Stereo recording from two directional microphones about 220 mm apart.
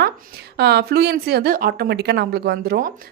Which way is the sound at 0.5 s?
45° right (ahead or behind).